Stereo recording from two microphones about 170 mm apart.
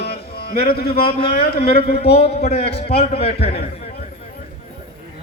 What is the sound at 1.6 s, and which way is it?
Speech, 65° left (ahead or behind).